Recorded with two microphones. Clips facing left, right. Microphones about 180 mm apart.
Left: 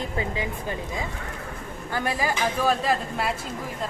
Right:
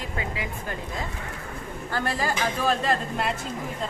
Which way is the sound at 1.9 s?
10° left (ahead or behind).